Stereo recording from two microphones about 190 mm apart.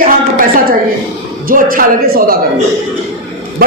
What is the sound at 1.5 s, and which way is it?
Speech, 45° right (ahead or behind).